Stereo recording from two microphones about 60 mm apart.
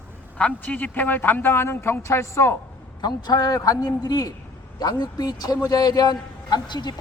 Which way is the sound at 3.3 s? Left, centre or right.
Left.